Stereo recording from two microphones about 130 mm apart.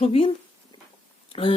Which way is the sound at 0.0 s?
45° left (ahead or behind).